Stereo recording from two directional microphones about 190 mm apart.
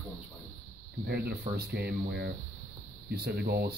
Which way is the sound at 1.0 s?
55° right (ahead or behind).